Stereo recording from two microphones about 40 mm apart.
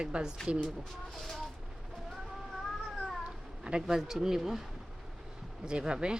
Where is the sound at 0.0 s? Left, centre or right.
Right.